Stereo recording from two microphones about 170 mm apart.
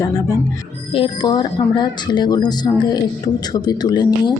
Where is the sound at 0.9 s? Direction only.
30° left (ahead or behind).